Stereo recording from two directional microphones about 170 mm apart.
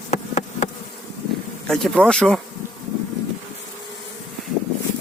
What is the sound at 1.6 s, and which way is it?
Speech, centre (ahead or behind).